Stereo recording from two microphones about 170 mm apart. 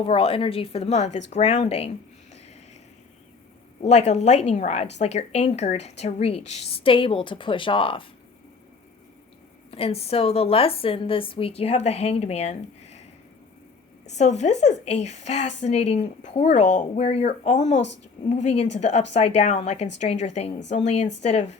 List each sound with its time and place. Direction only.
0.0 s a woman's voice: 35° left (ahead or behind)
3.8 s a woman's voice: 40° left (ahead or behind)
9.7 s a woman's voice: 35° left (ahead or behind)
14.2 s a woman's voice: 40° left (ahead or behind)